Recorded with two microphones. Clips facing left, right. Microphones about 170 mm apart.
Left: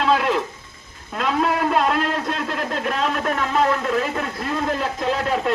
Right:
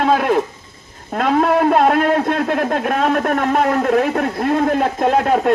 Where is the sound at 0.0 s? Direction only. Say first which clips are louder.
Right 4 dB; 50° right (ahead or behind).